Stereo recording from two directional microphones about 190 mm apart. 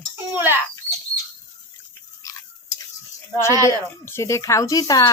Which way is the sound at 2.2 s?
15° left (ahead or behind).